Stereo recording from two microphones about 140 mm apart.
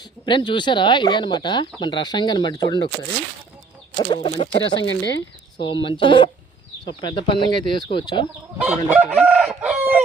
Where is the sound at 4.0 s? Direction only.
35° left (ahead or behind).